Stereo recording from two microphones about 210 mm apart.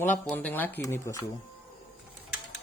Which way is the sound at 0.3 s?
5° left (ahead or behind).